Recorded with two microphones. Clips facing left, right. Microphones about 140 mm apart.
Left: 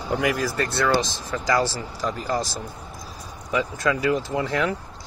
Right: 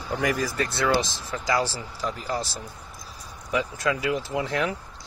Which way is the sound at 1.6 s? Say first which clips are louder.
Left 3 dB; 45° left (ahead or behind).